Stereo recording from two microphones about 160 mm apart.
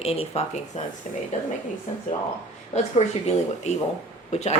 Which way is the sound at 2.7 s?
45° left (ahead or behind).